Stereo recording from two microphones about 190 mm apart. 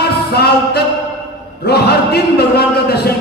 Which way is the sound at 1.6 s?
55° left (ahead or behind).